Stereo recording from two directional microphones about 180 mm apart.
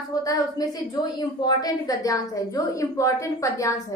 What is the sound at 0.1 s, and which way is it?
A woman's voice, 20° left (ahead or behind).